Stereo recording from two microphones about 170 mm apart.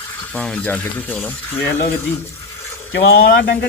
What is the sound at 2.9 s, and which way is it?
Speech, 80° left.